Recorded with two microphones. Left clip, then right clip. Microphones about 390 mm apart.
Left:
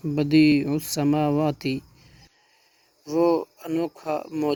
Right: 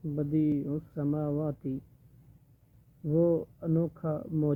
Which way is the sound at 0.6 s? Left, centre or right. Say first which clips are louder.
Left 9 dB; centre.